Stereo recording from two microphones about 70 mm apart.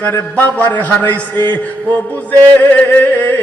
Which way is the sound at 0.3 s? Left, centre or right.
Left.